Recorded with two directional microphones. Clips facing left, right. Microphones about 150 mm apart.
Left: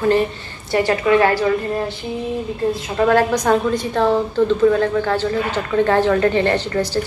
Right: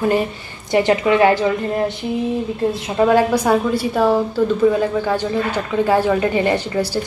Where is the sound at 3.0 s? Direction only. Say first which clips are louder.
Even; 10° right (ahead or behind).